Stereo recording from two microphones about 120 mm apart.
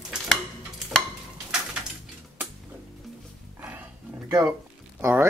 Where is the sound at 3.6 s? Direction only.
15° right (ahead or behind).